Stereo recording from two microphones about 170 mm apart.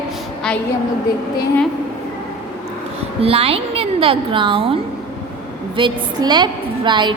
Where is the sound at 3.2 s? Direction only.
35° right (ahead or behind).